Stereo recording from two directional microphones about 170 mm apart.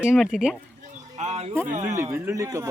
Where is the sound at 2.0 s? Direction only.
15° right (ahead or behind).